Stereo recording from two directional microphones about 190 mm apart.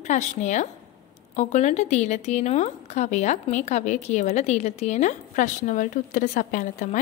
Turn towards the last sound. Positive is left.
turn(degrees=40)  # may be behind; listen again after turning